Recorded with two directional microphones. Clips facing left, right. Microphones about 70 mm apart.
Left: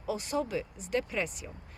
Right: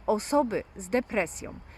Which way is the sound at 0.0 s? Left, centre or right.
Right.